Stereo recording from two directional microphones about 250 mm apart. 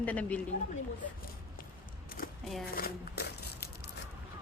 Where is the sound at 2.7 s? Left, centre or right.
Left.